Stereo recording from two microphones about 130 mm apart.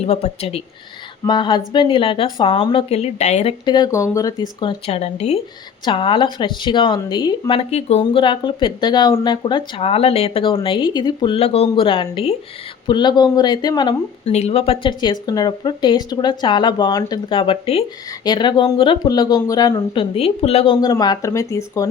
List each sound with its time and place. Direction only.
0.0 s speech: 55° left (ahead or behind)
1.2 s speech: 35° left (ahead or behind)
2.9 s speech: 55° left (ahead or behind)
3.9 s speech: 25° left (ahead or behind)
4.9 s speech: 55° left (ahead or behind)
5.8 s speech: 45° left (ahead or behind)
8.2 s speech: 35° left (ahead or behind)
11.3 s speech: 50° left (ahead or behind); by 14.3 s 35° left (ahead or behind)
14.3 s speech: 55° left (ahead or behind)
15.0 s speech: 30° left (ahead or behind); by 17.8 s 45° left (ahead or behind)
18.3 s speech: 35° left (ahead or behind); by 20.7 s 50° left (ahead or behind)
20.8 s speech: 30° left (ahead or behind)